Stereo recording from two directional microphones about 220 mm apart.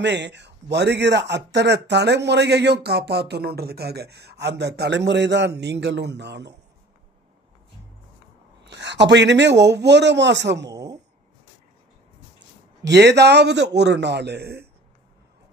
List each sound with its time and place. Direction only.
0.0 s speech: 50° right (ahead or behind)
8.6 s speech: 50° right (ahead or behind)
10.7 s a sound: 15° right (ahead or behind)
12.8 s speech: 50° right (ahead or behind)